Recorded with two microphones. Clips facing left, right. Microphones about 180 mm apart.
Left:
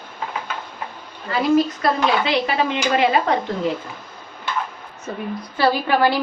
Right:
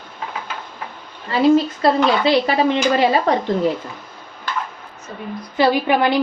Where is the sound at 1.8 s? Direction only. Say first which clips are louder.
Right 3 dB; 35° right (ahead or behind).